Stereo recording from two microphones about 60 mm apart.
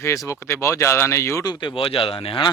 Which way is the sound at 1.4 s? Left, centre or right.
Left.